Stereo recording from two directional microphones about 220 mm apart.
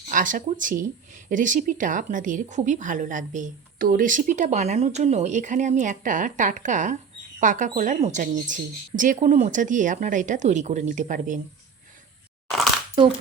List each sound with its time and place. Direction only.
0.1 s speech: 35° right (ahead or behind)